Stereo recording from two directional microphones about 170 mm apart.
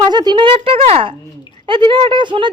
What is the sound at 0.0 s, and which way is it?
A woman's voice, 25° right (ahead or behind).